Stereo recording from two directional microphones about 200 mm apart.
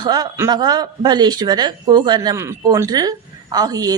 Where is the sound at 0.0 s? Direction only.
20° right (ahead or behind).